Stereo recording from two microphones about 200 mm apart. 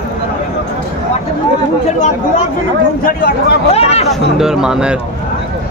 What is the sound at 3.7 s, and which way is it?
Speech, 30° left (ahead or behind).